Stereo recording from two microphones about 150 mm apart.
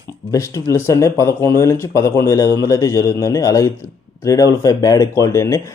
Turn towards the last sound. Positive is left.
turn(degrees=20)  # may be behind; listen again after turning